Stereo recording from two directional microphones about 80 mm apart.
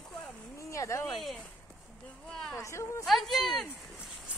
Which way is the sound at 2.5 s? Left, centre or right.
Left.